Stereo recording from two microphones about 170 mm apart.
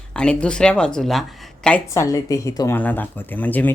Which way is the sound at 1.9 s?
20° left (ahead or behind).